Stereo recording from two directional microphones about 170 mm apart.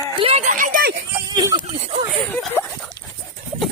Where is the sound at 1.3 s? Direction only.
25° right (ahead or behind).